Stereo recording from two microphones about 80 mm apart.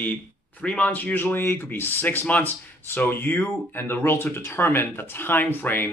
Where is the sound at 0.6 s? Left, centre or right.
Centre.